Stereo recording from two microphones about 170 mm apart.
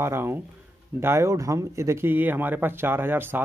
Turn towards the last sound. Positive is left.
turn(degrees=-10)  # may be behind; listen again after turning